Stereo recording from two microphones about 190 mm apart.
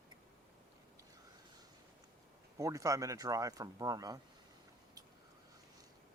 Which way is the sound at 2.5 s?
15° right (ahead or behind).